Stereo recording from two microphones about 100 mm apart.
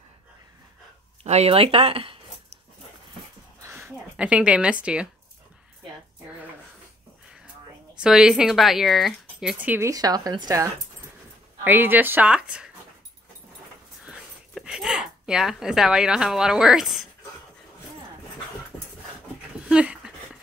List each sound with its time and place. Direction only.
1.3 s speech: 80° right
3.6 s a sound: 25° right (ahead or behind)
4.2 s a woman's voice: 10° right (ahead or behind)
7.9 s speech: 5° right (ahead or behind)
9.6 s a woman's voice: 15° right (ahead or behind)
9.8 s speech: 40° right (ahead or behind)
11.6 s speech: 20° right (ahead or behind)
14.0 s a sound: 10° right (ahead or behind)
19.7 s dog: 10° right (ahead or behind)